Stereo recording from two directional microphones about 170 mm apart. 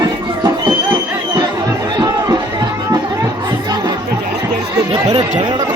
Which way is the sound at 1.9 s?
25° right (ahead or behind).